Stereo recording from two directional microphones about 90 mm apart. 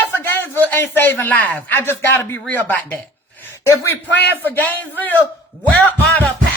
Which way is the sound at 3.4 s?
30° left (ahead or behind).